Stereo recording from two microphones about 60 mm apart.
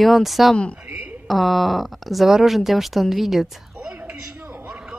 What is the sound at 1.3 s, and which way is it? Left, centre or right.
A woman's voice, centre.